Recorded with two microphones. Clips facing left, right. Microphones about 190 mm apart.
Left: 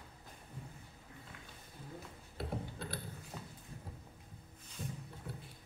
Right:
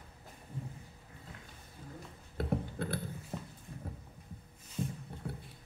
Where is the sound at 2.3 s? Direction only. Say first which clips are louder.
Right 7 dB; 55° right (ahead or behind).